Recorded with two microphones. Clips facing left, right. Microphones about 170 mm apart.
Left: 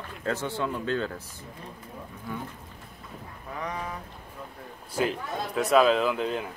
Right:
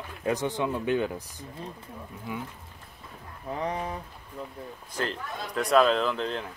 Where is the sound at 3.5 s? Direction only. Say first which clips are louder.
Right 4 dB; 30° right (ahead or behind).